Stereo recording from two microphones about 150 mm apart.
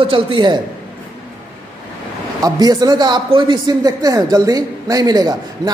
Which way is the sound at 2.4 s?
25° right (ahead or behind).